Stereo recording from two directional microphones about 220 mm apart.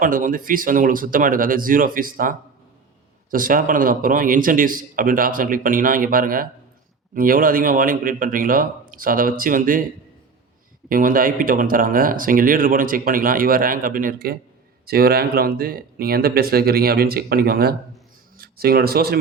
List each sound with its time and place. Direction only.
0.0 s speech: 40° right (ahead or behind)
10.8 s speech: 40° right (ahead or behind)